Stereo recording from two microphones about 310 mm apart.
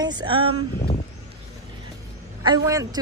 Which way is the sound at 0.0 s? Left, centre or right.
Centre.